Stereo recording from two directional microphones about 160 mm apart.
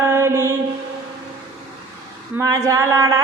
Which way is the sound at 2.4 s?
20° right (ahead or behind).